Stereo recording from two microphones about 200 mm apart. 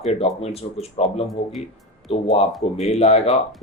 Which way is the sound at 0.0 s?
30° left (ahead or behind).